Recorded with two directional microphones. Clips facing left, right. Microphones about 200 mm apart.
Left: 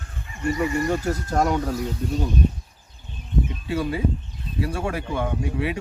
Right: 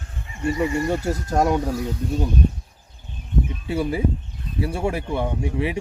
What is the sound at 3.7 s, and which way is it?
Speech, 25° right (ahead or behind).